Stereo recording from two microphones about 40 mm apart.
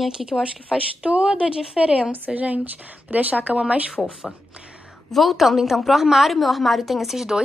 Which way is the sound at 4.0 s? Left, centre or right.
Centre.